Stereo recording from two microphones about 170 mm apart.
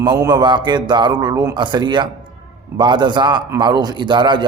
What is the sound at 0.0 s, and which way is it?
Speech, 25° right (ahead or behind).